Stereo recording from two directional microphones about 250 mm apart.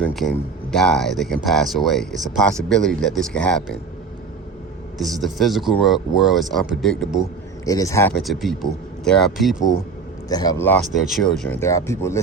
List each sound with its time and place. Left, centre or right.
0.0 s speech: centre
4.9 s speech: centre
7.6 s speech: centre
8.2 s speech: centre
10.2 s speech: centre
10.9 s speech: centre